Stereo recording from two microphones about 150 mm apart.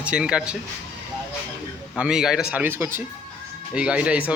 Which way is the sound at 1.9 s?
5° right (ahead or behind).